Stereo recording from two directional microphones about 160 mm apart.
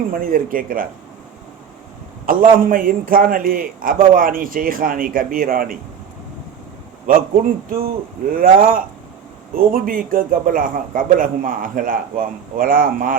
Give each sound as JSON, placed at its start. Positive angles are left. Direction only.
{"t": 0.1, "sound": "a man's voice", "side_deg": -60}
{"t": 2.2, "sound": "a man's voice", "side_deg": -60}
{"t": 7.7, "sound": "a man's voice", "side_deg": -65}